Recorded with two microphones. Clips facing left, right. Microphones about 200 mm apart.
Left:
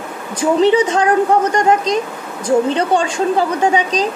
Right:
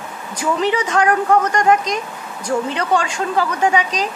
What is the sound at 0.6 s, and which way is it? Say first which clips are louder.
Speech: left 5 dB; 25° left (ahead or behind).